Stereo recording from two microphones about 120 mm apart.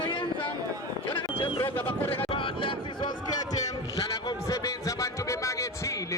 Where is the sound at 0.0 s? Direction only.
45° left (ahead or behind).